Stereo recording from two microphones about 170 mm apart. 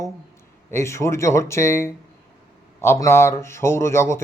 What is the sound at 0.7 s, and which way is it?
A man's voice, 15° left (ahead or behind).